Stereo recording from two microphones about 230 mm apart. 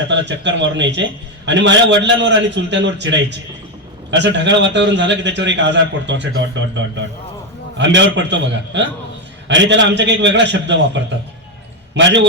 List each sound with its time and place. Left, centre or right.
0.1 s a man's voice: right